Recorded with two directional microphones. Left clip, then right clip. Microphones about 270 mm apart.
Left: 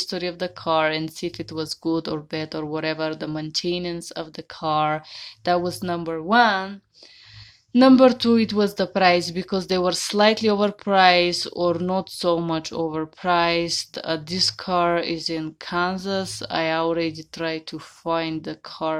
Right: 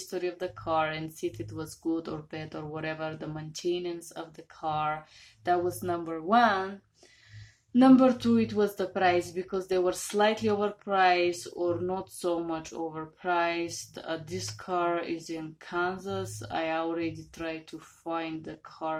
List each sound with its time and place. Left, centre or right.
0.1 s speech: left
7.7 s speech: left